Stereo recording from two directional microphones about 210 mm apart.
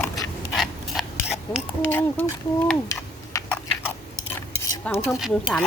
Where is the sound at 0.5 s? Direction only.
Centre (ahead or behind).